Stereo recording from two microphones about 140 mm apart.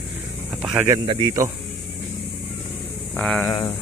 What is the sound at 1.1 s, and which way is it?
Speech, 40° right (ahead or behind).